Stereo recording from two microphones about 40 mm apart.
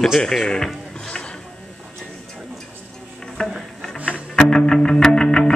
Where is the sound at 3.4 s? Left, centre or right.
Left.